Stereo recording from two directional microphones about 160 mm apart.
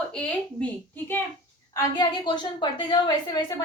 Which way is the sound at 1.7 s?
25° left (ahead or behind).